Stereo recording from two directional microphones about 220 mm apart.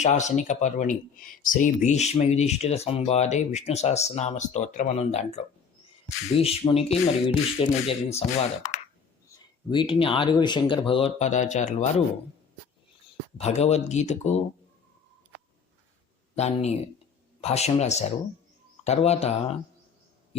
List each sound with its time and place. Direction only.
0.0 s speech: 30° left (ahead or behind)
13.4 s speech: 30° left (ahead or behind)
16.3 s speech: 30° left (ahead or behind)